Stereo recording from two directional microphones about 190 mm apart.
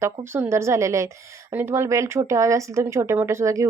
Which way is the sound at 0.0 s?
15° right (ahead or behind).